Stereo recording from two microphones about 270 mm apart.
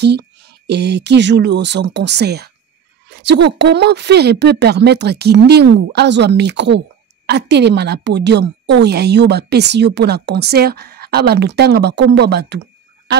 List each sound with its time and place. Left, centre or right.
0.0 s speech: right